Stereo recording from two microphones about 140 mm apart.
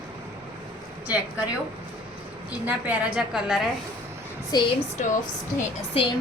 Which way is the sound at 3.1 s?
5° right (ahead or behind).